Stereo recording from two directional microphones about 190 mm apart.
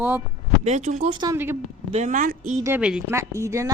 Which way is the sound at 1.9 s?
40° right (ahead or behind).